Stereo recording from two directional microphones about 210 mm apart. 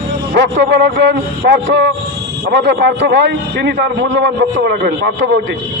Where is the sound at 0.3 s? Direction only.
60° right (ahead or behind).